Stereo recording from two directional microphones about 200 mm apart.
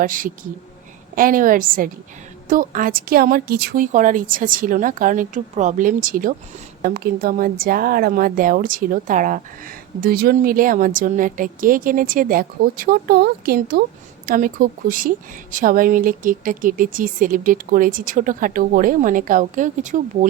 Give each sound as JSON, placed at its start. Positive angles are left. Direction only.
{"t": 0.0, "sound": "speech", "side_deg": -45}